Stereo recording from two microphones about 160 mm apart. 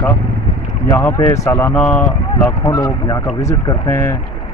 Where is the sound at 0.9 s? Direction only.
15° left (ahead or behind).